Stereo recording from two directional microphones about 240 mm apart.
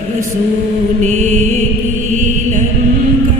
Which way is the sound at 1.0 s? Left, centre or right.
Right.